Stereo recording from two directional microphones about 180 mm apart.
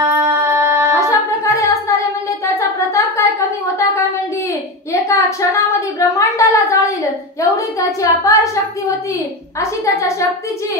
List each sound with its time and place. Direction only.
0.0 s music: 15° right (ahead or behind)
0.9 s music: 15° left (ahead or behind)
2.4 s a sound: 15° left (ahead or behind)
5.0 s a woman's voice: 15° left (ahead or behind)
9.6 s a woman's voice: 15° left (ahead or behind)